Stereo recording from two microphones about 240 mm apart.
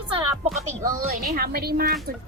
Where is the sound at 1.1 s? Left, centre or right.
Right.